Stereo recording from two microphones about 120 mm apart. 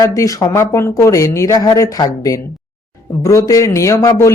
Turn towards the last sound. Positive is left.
turn(degrees=25)  # may be behind; listen again after turning